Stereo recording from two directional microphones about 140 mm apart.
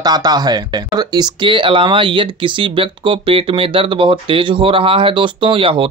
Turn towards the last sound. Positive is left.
turn(degrees=-40)  # may be behind; listen again after turning